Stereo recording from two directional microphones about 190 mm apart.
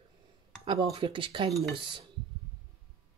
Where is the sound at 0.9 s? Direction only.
25° right (ahead or behind).